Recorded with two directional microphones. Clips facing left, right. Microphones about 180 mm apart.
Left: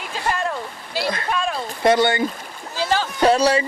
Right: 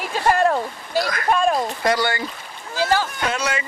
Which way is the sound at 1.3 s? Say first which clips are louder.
Right 5 dB; 50° right (ahead or behind).